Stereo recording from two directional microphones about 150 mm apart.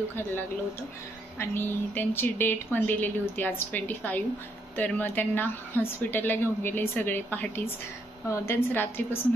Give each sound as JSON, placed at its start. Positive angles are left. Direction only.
{"t": 1.4, "sound": "a woman's voice", "side_deg": 15}